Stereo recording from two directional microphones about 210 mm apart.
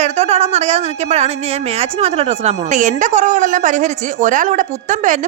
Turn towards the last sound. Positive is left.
turn(degrees=-35)  # may be behind; listen again after turning